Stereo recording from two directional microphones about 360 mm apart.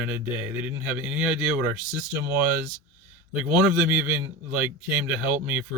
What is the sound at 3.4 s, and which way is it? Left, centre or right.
Speech, centre.